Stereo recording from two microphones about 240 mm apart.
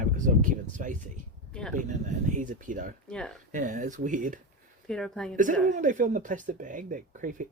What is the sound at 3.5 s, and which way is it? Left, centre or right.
Speech, right.